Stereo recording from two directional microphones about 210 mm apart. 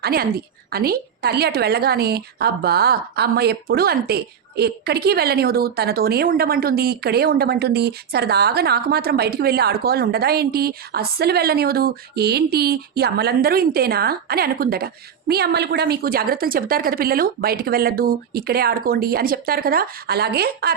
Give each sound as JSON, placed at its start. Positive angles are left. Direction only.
{"t": 0.0, "sound": "a woman's voice", "side_deg": -45}